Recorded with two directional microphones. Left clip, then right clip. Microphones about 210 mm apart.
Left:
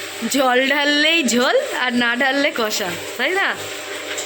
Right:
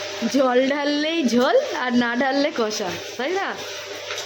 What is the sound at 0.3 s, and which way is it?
Speech, 5° right (ahead or behind).